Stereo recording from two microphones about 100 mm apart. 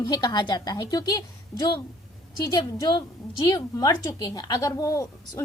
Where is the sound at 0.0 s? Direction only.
45° left (ahead or behind).